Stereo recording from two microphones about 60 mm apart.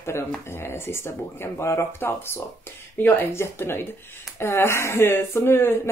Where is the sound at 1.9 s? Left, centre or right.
Left.